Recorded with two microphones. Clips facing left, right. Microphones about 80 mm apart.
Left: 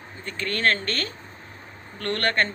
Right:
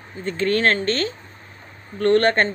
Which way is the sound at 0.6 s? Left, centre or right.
Right.